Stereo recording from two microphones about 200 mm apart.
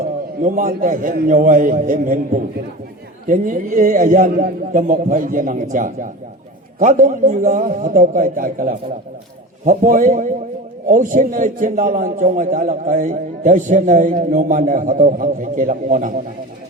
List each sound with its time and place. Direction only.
0.0 s a man's voice: 40° right (ahead or behind)